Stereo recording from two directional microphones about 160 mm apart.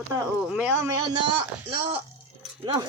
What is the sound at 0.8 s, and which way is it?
Speech, 30° right (ahead or behind).